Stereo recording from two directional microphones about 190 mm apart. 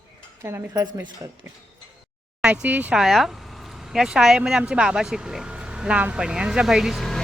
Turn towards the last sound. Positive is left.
turn(degrees=0)  # may be behind; listen again after turning